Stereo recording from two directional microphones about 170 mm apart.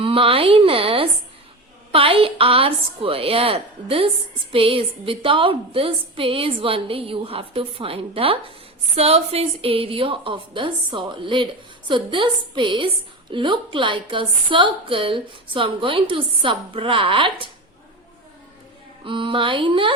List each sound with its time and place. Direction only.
0.0 s a woman's voice: 30° right (ahead or behind)
19.0 s a woman's voice: 30° right (ahead or behind)